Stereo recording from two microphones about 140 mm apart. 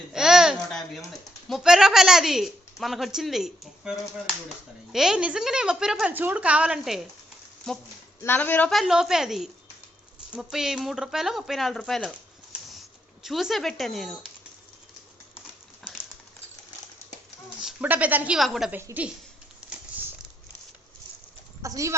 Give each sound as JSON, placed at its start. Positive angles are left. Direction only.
{"t": 0.1, "sound": "babbling", "side_deg": -5}
{"t": 1.5, "sound": "a woman's voice", "side_deg": 0}
{"t": 8.2, "sound": "speech", "side_deg": 15}
{"t": 8.7, "sound": "a woman's voice", "side_deg": 0}
{"t": 13.2, "sound": "a woman's voice", "side_deg": 0}
{"t": 17.6, "sound": "a woman's voice", "side_deg": -5}
{"t": 18.7, "sound": "a woman's voice", "side_deg": -15}
{"t": 21.6, "sound": "speech", "side_deg": -20}